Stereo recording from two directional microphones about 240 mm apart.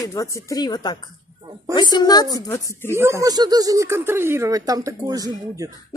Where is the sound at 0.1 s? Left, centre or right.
Centre.